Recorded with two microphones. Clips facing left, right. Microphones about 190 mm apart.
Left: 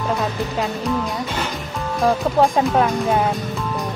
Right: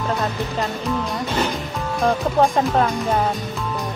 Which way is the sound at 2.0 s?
Centre (ahead or behind).